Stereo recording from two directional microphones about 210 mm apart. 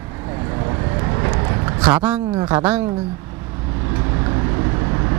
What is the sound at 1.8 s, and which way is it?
Speech, 5° right (ahead or behind).